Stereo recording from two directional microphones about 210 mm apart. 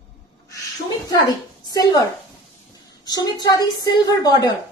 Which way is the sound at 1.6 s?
20° left (ahead or behind).